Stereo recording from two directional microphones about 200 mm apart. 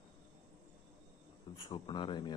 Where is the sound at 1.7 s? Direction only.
25° left (ahead or behind).